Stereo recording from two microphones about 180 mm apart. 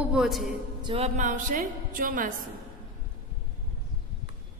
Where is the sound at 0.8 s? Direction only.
35° right (ahead or behind); by 2.3 s 50° right (ahead or behind).